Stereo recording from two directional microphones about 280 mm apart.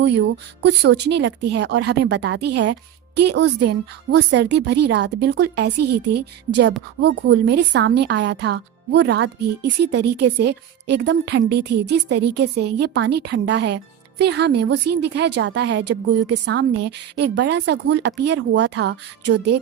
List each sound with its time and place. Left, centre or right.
0.6 s a woman's voice: right